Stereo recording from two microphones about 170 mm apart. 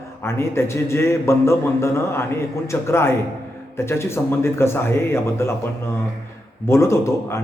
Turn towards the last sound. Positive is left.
turn(degrees=15)  # may be behind; listen again after turning